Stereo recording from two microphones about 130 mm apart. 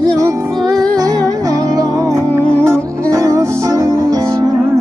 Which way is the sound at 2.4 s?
5° left (ahead or behind).